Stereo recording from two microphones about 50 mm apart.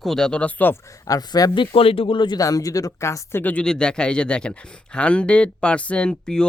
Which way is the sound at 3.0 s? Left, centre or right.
Left.